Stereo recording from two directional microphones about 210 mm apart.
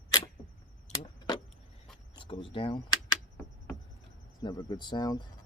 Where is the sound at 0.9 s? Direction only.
30° left (ahead or behind).